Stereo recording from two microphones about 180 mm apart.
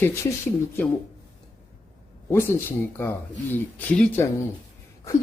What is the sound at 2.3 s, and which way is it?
Speech, 10° left (ahead or behind).